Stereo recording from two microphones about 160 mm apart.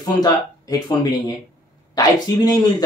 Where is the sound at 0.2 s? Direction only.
25° left (ahead or behind).